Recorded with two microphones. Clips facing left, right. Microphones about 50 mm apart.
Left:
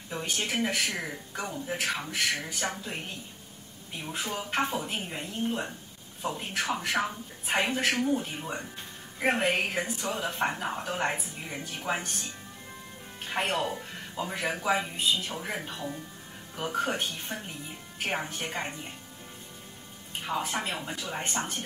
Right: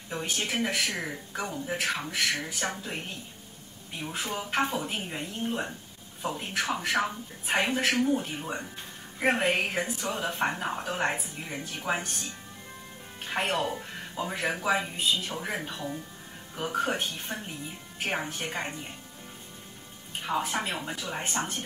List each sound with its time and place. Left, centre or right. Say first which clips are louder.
0.1 s speech: even; centre
20.2 s speech: right 2 dB; centre